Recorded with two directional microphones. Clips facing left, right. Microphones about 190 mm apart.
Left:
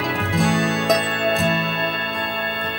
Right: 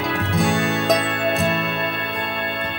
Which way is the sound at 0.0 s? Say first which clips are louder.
Even; centre (ahead or behind).